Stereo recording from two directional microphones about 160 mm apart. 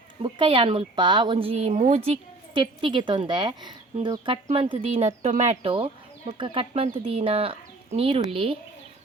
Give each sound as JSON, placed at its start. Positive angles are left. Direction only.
{"t": 0.2, "sound": "speech", "side_deg": -30}
{"t": 2.0, "sound": "a woman's voice", "side_deg": -30}